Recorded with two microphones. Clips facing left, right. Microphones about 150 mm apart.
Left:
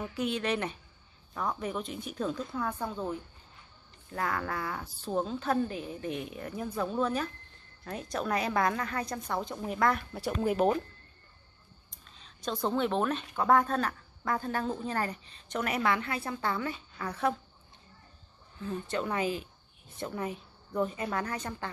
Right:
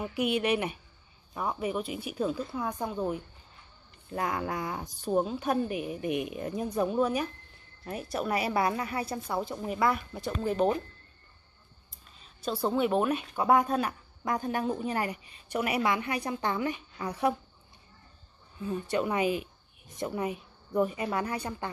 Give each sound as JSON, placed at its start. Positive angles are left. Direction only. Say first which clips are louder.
{"t": 0.0, "sound": "speech", "louder": "right 3 dB", "side_deg": -10}
{"t": 10.2, "sound": "speech", "louder": "even", "side_deg": 10}
{"t": 11.9, "sound": "speech", "louder": "even", "side_deg": -5}
{"t": 18.6, "sound": "speech", "louder": "right 4 dB", "side_deg": -15}